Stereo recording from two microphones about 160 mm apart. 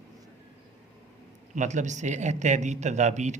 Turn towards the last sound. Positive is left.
turn(degrees=-45)  # may be behind; listen again after turning